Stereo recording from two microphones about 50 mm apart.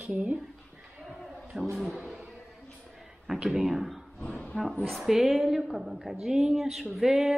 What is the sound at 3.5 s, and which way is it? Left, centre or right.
A woman's voice, centre.